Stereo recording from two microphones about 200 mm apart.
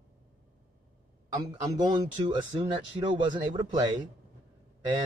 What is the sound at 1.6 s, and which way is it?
Speech, 20° right (ahead or behind).